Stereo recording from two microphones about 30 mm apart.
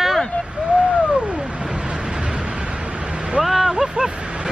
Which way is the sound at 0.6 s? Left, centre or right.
Right.